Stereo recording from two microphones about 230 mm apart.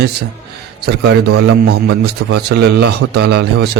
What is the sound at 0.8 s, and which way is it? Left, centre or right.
A man's voice, right.